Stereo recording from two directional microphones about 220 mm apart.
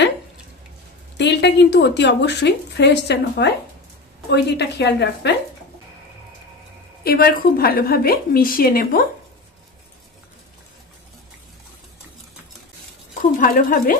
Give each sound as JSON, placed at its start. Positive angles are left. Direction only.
{"t": 1.1, "sound": "speech", "side_deg": 50}
{"t": 7.0, "sound": "speech", "side_deg": 45}
{"t": 13.2, "sound": "speech", "side_deg": 40}